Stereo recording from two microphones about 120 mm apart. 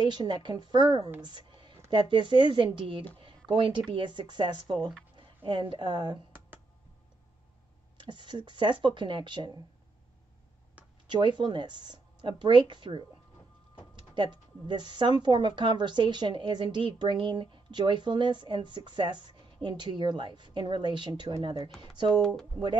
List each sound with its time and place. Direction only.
0.0 s a woman's voice: 40° right (ahead or behind)
1.2 s a sound: 40° right (ahead or behind)
1.9 s a woman's voice: 45° right (ahead or behind)
8.0 s a woman's voice: 40° right (ahead or behind)
11.1 s a woman's voice: 40° right (ahead or behind)
14.1 s a woman's voice: 40° right (ahead or behind)
22.2 s speech: 5° left (ahead or behind)